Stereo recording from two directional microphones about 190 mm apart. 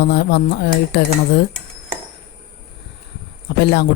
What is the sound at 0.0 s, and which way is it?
Speech, 60° left (ahead or behind).